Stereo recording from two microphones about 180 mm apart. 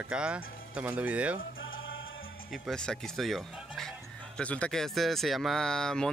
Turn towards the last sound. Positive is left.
turn(degrees=5)  # may be behind; listen again after turning